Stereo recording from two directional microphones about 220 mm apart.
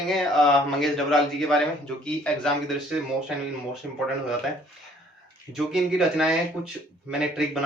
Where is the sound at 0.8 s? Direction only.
Centre (ahead or behind).